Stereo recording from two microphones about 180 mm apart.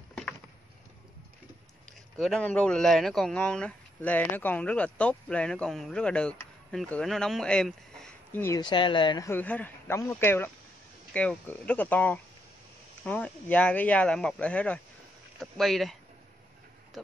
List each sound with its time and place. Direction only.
2.1 s speech: 5° left (ahead or behind)
8.5 s a man's voice: 25° left (ahead or behind); by 16.0 s centre (ahead or behind)